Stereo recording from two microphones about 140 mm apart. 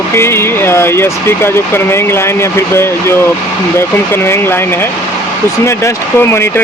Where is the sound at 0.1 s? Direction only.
15° left (ahead or behind).